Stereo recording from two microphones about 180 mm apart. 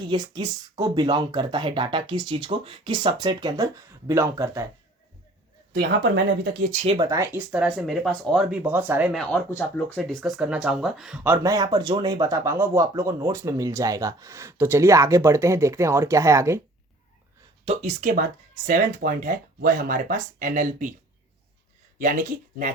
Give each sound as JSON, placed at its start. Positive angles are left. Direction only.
{"t": 0.1, "sound": "speech", "side_deg": -25}
{"t": 5.7, "sound": "speech", "side_deg": -60}
{"t": 6.7, "sound": "speech", "side_deg": -35}
{"t": 7.0, "sound": "speech", "side_deg": -15}
{"t": 17.7, "sound": "speech", "side_deg": -35}
{"t": 18.1, "sound": "speech", "side_deg": -50}
{"t": 21.9, "sound": "speech", "side_deg": -50}